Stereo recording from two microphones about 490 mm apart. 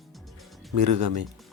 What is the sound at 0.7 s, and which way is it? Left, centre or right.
Speech, right.